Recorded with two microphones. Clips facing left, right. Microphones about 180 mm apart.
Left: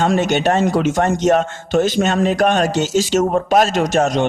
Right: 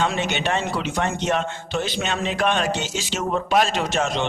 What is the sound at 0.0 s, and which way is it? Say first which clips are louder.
A man's voice: left 8 dB; 45° left (ahead or behind).